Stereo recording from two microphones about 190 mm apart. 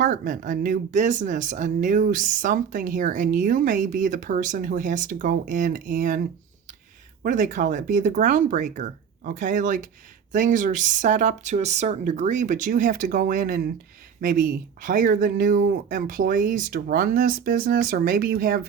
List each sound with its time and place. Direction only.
0.0 s speech: 45° right (ahead or behind)